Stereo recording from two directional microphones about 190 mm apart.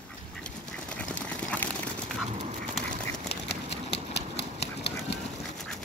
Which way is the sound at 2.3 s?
35° right (ahead or behind).